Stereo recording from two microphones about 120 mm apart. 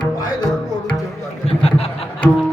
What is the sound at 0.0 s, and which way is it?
Music, 35° left (ahead or behind).